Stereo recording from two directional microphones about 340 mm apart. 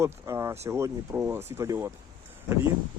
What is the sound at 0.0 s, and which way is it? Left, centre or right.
Speech, centre.